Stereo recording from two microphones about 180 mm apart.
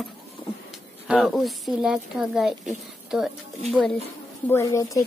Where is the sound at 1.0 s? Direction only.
Centre (ahead or behind).